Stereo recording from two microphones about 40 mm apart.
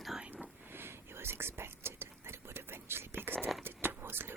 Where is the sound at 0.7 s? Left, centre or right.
Right.